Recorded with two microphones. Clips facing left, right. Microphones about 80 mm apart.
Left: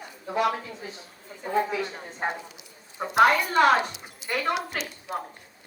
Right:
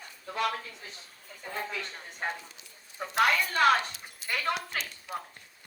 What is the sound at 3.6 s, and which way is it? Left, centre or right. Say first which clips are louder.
Speech: left 4 dB; left.